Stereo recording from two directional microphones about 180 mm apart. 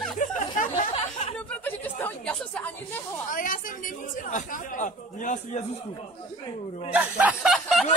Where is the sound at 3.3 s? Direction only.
45° left (ahead or behind).